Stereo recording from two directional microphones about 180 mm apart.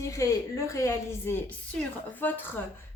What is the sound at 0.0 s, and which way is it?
A woman's voice, 15° left (ahead or behind).